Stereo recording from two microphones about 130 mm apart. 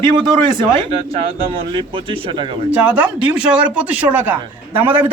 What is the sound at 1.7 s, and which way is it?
Speech, 40° right (ahead or behind).